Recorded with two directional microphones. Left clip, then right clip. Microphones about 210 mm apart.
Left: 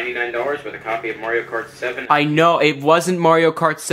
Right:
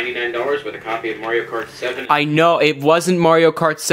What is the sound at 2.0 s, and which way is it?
Speech, 35° right (ahead or behind).